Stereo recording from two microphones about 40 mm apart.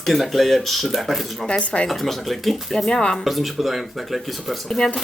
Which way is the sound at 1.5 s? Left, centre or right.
Left.